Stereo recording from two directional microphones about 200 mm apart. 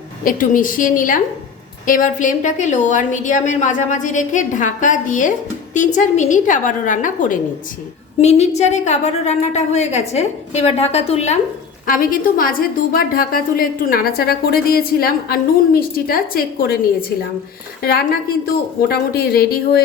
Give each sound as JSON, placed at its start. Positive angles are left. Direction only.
{"t": 0.3, "sound": "a woman's voice", "side_deg": 40}
{"t": 11.9, "sound": "a woman's voice", "side_deg": 45}
{"t": 18.4, "sound": "a woman's voice", "side_deg": 50}